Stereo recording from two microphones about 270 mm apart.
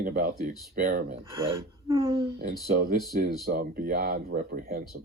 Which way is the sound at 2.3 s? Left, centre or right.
Right.